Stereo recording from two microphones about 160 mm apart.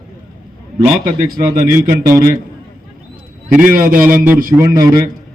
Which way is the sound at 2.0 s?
15° right (ahead or behind).